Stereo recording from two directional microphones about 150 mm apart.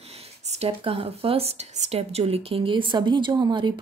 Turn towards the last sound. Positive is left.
turn(degrees=-30)  # may be behind; listen again after turning